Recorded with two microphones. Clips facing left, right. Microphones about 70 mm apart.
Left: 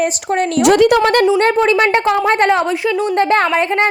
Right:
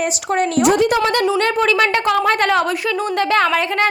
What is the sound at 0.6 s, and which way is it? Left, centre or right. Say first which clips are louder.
Speech: left 6 dB; left.